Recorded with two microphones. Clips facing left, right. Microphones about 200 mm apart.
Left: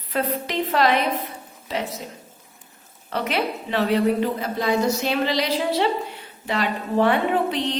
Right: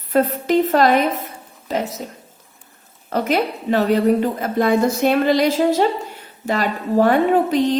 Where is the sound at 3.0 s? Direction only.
45° right (ahead or behind).